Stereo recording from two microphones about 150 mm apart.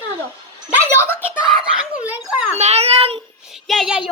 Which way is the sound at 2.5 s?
45° right (ahead or behind).